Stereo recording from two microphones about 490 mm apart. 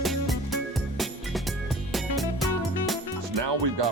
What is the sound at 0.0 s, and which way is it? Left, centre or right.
Music, centre.